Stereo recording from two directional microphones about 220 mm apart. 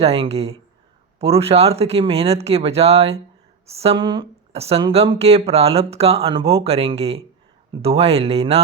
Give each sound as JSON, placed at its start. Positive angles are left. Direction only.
{"t": 0.0, "sound": "speech", "side_deg": -25}